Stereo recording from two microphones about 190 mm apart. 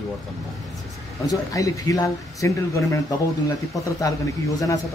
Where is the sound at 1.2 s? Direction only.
20° left (ahead or behind).